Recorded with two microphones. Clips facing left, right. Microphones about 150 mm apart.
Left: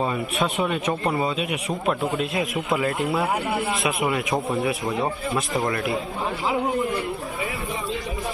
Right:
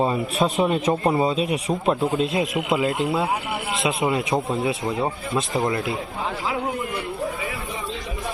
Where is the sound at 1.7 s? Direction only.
20° right (ahead or behind).